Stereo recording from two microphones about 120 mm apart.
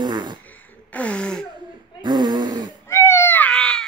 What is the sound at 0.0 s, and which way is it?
Fart, 40° right (ahead or behind).